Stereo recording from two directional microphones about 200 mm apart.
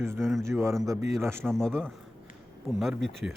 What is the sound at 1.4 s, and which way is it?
Speech, 5° left (ahead or behind).